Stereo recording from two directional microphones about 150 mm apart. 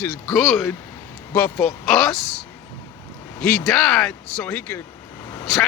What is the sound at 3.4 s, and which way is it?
Speech, 5° left (ahead or behind).